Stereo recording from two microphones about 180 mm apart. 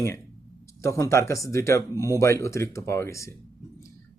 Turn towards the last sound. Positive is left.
turn(degrees=15)  # may be behind; listen again after turning